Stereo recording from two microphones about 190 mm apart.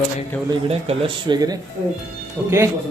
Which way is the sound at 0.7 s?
30° right (ahead or behind).